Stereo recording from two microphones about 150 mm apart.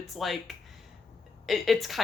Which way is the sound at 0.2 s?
Centre (ahead or behind).